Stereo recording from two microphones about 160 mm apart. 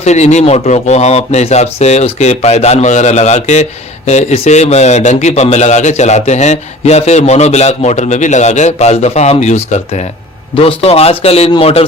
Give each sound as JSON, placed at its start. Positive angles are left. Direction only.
{"t": 0.0, "sound": "a man's voice", "side_deg": 45}